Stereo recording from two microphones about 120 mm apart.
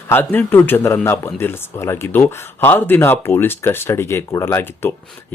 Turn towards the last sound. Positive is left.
turn(degrees=20)  # may be behind; listen again after turning